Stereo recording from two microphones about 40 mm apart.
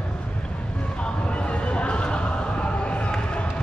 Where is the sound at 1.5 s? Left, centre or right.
Left.